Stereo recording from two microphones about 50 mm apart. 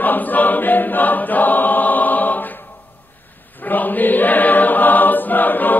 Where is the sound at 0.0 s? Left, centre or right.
Left.